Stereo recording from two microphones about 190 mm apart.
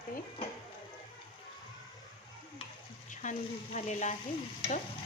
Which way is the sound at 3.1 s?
40° left (ahead or behind).